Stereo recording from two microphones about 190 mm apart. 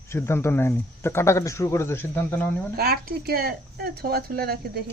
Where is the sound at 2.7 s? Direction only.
55° right (ahead or behind).